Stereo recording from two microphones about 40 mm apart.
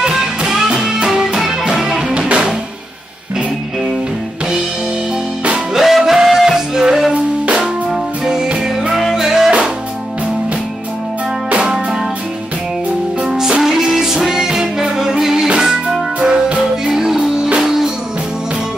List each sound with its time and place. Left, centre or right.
0.0 s music: centre
2.1 s music: right
5.8 s music: centre
9.1 s music: centre
11.5 s music: right
13.4 s music: centre
16.2 s music: right
16.8 s music: centre